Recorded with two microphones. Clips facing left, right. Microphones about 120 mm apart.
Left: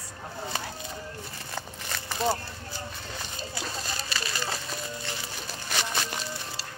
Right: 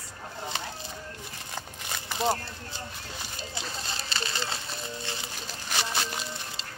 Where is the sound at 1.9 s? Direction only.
15° right (ahead or behind).